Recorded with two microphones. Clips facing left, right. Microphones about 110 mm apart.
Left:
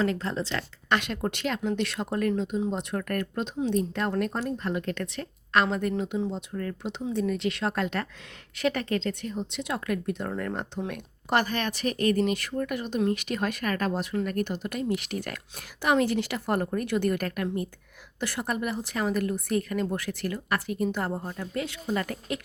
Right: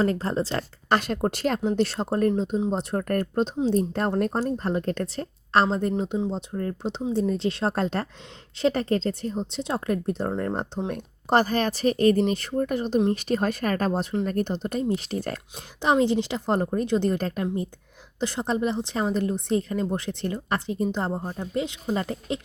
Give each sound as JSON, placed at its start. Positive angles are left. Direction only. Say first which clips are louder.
{"t": 0.0, "sound": "a woman's voice", "louder": "right 4 dB", "side_deg": -40}